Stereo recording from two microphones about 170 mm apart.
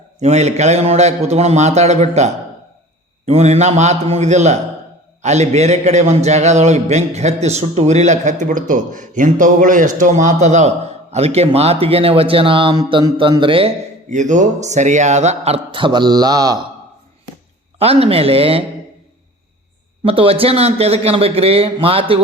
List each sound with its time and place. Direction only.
0.2 s a man's voice: 40° right (ahead or behind)
14.1 s speech: 45° right (ahead or behind); by 16.6 s 25° right (ahead or behind)
17.7 s speech: 35° right (ahead or behind)
20.1 s speech: 35° right (ahead or behind)